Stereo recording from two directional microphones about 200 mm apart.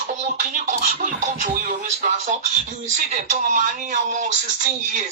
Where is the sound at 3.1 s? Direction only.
35° right (ahead or behind).